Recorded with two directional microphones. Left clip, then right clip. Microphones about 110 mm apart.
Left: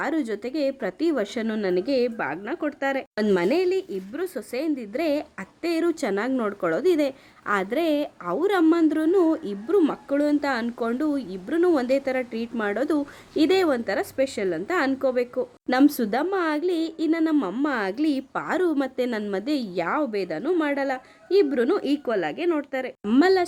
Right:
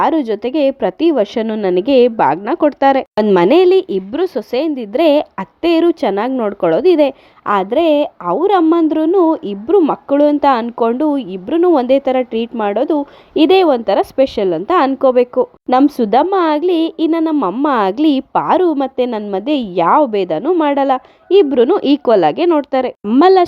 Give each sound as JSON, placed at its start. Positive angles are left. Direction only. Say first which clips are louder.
{"t": 0.0, "sound": "speech", "louder": "right 13 dB", "side_deg": -40}
{"t": 0.5, "sound": "a woman's voice", "louder": "right 12 dB", "side_deg": -55}
{"t": 1.6, "sound": "a woman's voice", "louder": "right 13 dB", "side_deg": -65}
{"t": 4.2, "sound": "a woman's voice", "louder": "right 12 dB", "side_deg": -50}
{"t": 5.9, "sound": "speech", "louder": "right 10 dB", "side_deg": -40}
{"t": 9.9, "sound": "a woman's voice", "louder": "right 11 dB", "side_deg": -50}
{"t": 12.5, "sound": "a woman's voice", "louder": "right 9 dB", "side_deg": -35}
{"t": 17.7, "sound": "a woman's voice", "louder": "right 15 dB", "side_deg": -65}
{"t": 18.6, "sound": "a woman's voice", "louder": "right 10 dB", "side_deg": -35}
{"t": 23.2, "sound": "a woman's voice", "louder": "right 12 dB", "side_deg": -50}